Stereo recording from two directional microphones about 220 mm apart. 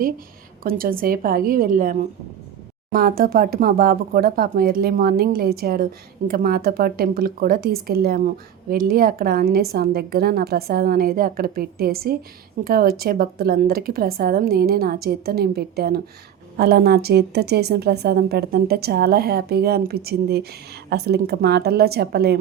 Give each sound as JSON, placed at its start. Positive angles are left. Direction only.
{"t": 0.6, "sound": "a woman's voice", "side_deg": -40}